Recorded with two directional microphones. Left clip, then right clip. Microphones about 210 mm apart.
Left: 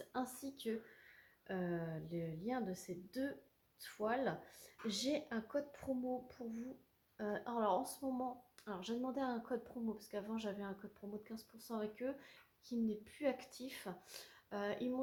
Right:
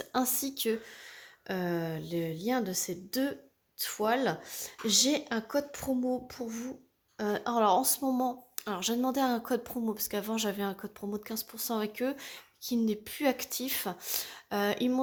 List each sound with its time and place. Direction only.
0.0 s a woman's voice: 50° right (ahead or behind)